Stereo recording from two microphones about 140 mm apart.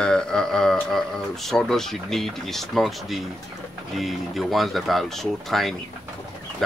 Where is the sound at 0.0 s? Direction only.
5° left (ahead or behind).